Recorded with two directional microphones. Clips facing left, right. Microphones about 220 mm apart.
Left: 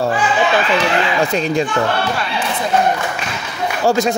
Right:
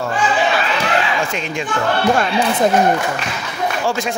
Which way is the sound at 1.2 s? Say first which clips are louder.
Left 6 dB; 35° left (ahead or behind).